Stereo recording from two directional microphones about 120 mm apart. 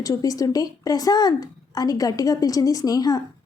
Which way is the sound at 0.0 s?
30° left (ahead or behind).